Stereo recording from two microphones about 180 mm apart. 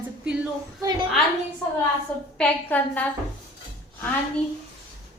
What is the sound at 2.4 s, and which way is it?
Speech, 10° left (ahead or behind).